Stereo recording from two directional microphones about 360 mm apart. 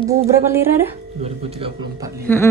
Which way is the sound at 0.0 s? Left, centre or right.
Centre.